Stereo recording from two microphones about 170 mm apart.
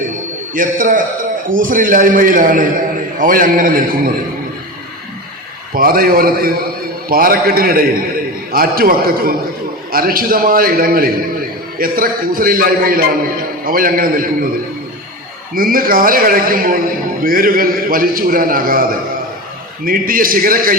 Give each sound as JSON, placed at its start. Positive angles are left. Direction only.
{"t": 0.5, "sound": "a man's voice", "side_deg": -50}
{"t": 5.7, "sound": "a man's voice", "side_deg": -60}
{"t": 15.5, "sound": "a man's voice", "side_deg": -55}